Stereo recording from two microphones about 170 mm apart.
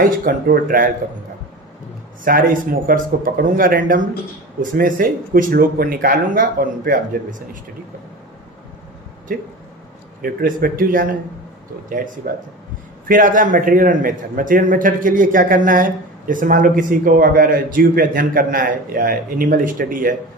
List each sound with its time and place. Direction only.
0.0 s speech: 60° right (ahead or behind)
2.2 s speech: 55° right (ahead or behind)
10.2 s a man's voice: 60° right (ahead or behind)